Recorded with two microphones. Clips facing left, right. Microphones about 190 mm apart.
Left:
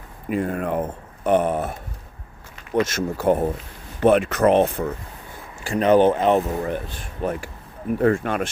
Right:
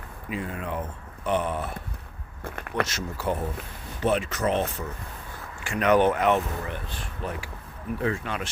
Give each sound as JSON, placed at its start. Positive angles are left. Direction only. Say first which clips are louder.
{"t": 0.3, "sound": "speech", "louder": "left 9 dB", "side_deg": 50}
{"t": 2.4, "sound": "a sound", "louder": "left 6 dB", "side_deg": -55}
{"t": 2.8, "sound": "speech", "louder": "left 9 dB", "side_deg": 50}
{"t": 5.6, "sound": "speech", "louder": "left 5 dB", "side_deg": 35}
{"t": 6.7, "sound": "speech", "louder": "left 8 dB", "side_deg": 50}